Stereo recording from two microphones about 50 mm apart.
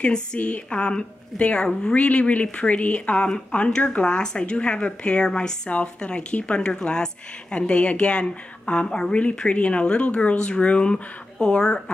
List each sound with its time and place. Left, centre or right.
0.0 s a woman's voice: centre